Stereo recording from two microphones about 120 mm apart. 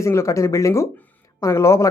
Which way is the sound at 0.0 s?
25° left (ahead or behind).